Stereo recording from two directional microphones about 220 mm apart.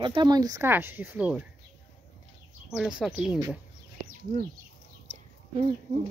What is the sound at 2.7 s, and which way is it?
Speech, 5° right (ahead or behind).